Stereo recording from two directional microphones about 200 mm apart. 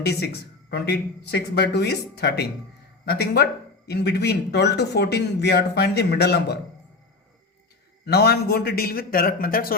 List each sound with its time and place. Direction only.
0.0 s speech: 55° left (ahead or behind)
8.0 s a man's voice: 55° left (ahead or behind)